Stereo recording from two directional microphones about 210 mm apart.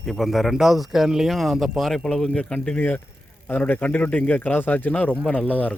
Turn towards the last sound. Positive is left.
turn(degrees=5)  # may be behind; listen again after turning